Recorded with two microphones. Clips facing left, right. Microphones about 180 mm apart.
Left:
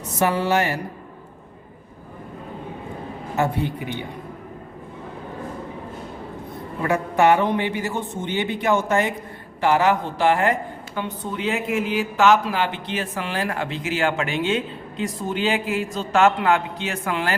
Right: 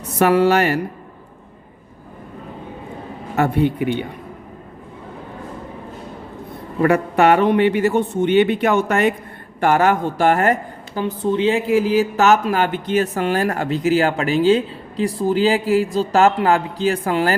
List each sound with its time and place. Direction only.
0.2 s a woman's voice: 65° right (ahead or behind)
3.3 s a man's voice: 65° right (ahead or behind)
6.8 s a man's voice: 65° right (ahead or behind)
9.6 s a woman's voice: 50° right (ahead or behind)
11.0 s speech: 30° right (ahead or behind)